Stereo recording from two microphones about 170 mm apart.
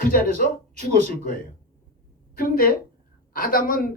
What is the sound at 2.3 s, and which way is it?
Speech, 60° left (ahead or behind).